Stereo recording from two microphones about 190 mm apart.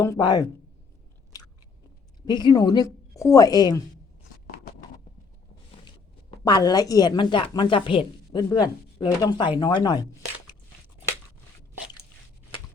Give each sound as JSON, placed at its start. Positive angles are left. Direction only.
{"t": 0.0, "sound": "a woman's voice", "side_deg": 20}
{"t": 2.2, "sound": "a woman's voice", "side_deg": 20}
{"t": 6.4, "sound": "a woman's voice", "side_deg": 20}